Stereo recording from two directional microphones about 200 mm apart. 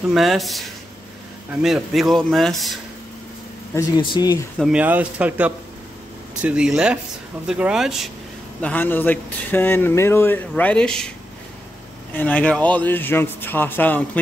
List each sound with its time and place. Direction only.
0.1 s speech: centre (ahead or behind)
3.7 s speech: 20° left (ahead or behind)
4.6 s speech: 5° right (ahead or behind)
12.1 s speech: 5° left (ahead or behind)